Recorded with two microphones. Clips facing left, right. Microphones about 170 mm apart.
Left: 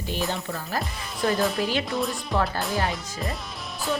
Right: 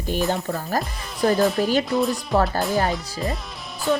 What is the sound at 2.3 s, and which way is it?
Speech, 40° right (ahead or behind).